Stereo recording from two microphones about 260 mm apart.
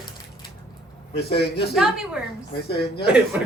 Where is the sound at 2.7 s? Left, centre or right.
Left.